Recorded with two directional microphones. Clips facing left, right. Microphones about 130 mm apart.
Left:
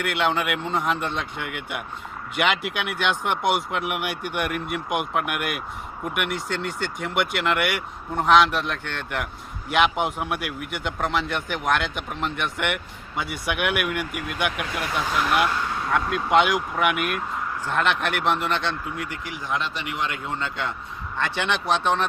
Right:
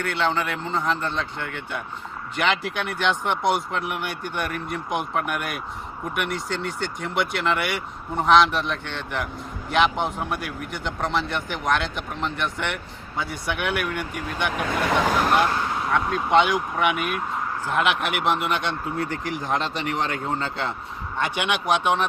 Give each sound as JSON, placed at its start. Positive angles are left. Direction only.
{"t": 0.0, "sound": "speech", "side_deg": 10}
{"t": 15.9, "sound": "speech", "side_deg": 0}
{"t": 18.9, "sound": "speech", "side_deg": -35}
{"t": 21.2, "sound": "speech", "side_deg": -15}